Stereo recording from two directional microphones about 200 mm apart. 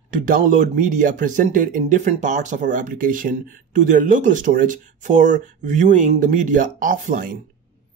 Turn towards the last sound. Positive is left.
turn(degrees=-40)  # may be behind; listen again after turning